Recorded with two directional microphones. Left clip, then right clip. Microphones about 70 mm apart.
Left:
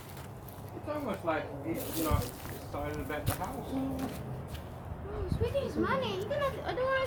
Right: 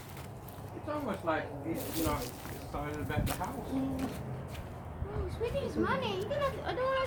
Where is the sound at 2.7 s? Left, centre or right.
Right.